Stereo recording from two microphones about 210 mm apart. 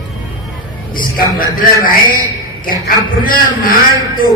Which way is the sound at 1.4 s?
40° left (ahead or behind).